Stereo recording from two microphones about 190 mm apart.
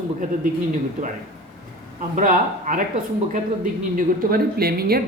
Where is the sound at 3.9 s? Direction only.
50° right (ahead or behind).